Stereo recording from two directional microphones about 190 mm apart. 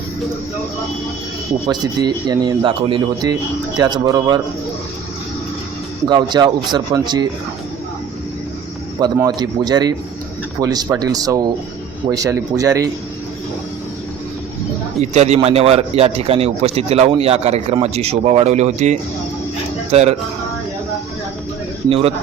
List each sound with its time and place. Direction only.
1.6 s speech: 20° right (ahead or behind)
6.1 s speech: 25° right (ahead or behind)
9.1 s speech: 20° right (ahead or behind)
15.1 s speech: 35° right (ahead or behind)
21.8 s speech: 30° right (ahead or behind)